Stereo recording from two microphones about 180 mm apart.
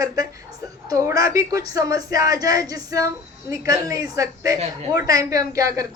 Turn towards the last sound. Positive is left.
turn(degrees=-20)  # may be behind; listen again after turning